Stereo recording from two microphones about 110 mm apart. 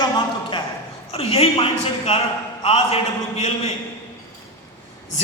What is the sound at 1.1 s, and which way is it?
A man's voice, 65° left (ahead or behind).